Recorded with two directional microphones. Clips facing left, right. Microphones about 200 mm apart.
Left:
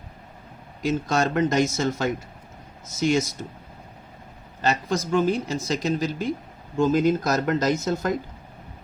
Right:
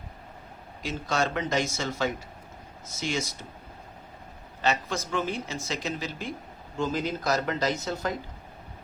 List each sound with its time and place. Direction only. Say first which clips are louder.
0.8 s speech: left 5 dB; 45° left (ahead or behind)
4.6 s speech: left 4 dB; 40° left (ahead or behind)